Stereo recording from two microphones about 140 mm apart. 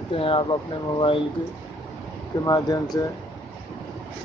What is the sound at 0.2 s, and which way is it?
Speech, 40° left (ahead or behind).